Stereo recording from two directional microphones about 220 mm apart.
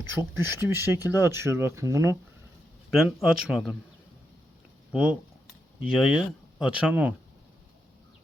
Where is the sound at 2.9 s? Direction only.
Centre (ahead or behind).